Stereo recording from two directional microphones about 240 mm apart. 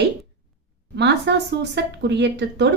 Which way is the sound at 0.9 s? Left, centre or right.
Right.